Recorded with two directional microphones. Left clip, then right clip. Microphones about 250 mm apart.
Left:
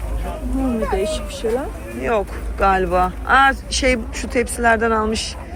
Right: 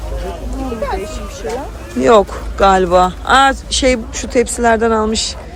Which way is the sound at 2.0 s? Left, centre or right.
Right.